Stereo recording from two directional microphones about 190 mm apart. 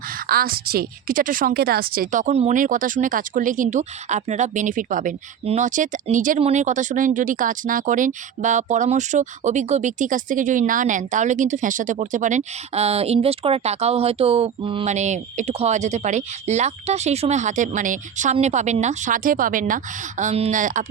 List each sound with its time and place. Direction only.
0.1 s a woman's voice: 50° right (ahead or behind)